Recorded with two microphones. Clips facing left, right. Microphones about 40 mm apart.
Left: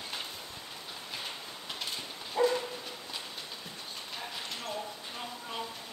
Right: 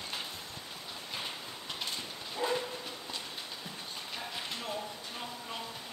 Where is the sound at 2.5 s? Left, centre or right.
Centre.